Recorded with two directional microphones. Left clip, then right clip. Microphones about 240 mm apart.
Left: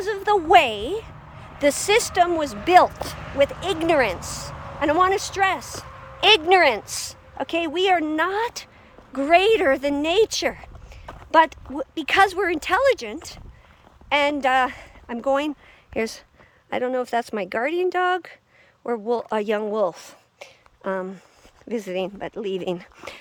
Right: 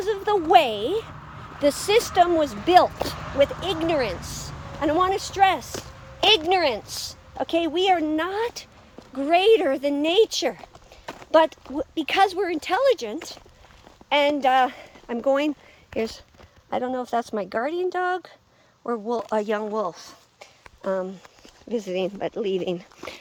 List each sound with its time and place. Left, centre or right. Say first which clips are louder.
0.0 s speech: left 2 dB; centre
3.2 s speech: left 1 dB; centre
11.0 s clip-clop: right 3 dB; right
11.3 s speech: left 1 dB; centre